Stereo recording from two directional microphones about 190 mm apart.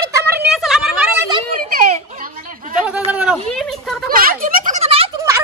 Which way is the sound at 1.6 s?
50° right (ahead or behind).